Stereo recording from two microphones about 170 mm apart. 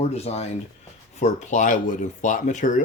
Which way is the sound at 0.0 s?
40° left (ahead or behind).